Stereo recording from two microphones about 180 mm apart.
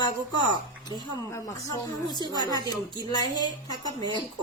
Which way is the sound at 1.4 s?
20° left (ahead or behind).